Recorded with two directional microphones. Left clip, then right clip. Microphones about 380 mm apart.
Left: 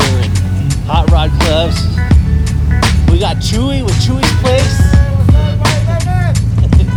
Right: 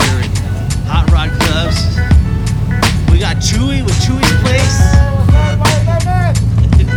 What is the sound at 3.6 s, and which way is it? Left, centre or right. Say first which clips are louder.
Speech: left 1 dB; centre.